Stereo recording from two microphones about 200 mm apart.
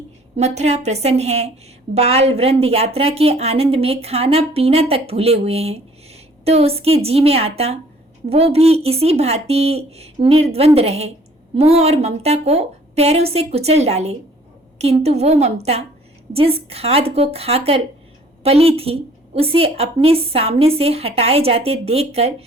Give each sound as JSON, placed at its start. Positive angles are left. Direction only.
{"t": 0.3, "sound": "speech", "side_deg": -35}